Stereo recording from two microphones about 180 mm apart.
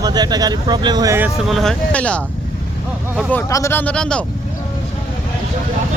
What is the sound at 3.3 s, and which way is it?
Speech, 15° left (ahead or behind).